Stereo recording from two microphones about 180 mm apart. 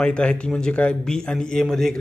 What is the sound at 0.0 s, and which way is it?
A man's voice, 5° left (ahead or behind).